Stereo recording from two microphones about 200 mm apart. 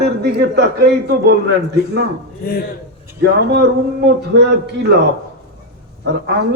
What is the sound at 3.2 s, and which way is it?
Speech, 50° right (ahead or behind).